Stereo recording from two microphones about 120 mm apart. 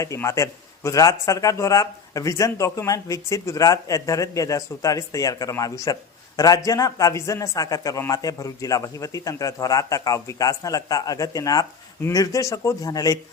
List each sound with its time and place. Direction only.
0.0 s a man's voice: 25° left (ahead or behind)